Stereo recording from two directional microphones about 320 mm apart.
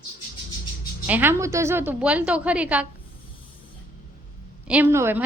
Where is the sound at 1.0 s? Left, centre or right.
Centre.